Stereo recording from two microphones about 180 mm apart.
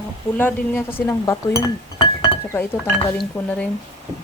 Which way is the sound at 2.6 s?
10° left (ahead or behind).